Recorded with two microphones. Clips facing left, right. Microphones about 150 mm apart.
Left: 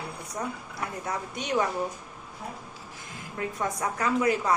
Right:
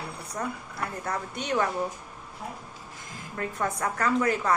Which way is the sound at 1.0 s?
15° left (ahead or behind).